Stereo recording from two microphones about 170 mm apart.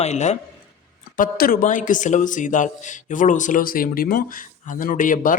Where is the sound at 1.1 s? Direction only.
55° left (ahead or behind).